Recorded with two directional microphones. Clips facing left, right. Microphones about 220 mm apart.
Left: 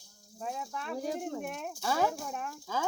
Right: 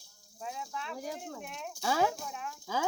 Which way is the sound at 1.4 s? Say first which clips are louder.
Left 5 dB; 45° left (ahead or behind).